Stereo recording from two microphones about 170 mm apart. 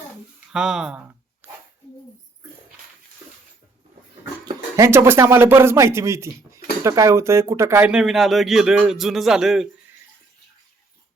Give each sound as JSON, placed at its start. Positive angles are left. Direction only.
{"t": 0.5, "sound": "speech", "side_deg": -5}
{"t": 1.4, "sound": "a sound", "side_deg": -10}
{"t": 4.4, "sound": "speech", "side_deg": -20}